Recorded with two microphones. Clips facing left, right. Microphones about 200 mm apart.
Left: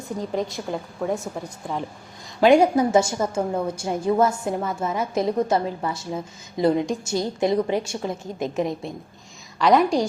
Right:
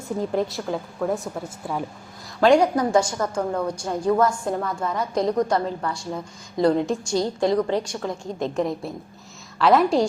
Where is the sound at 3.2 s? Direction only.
5° left (ahead or behind).